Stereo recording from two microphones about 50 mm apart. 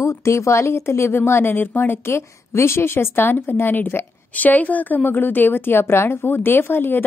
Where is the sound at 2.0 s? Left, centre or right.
Left.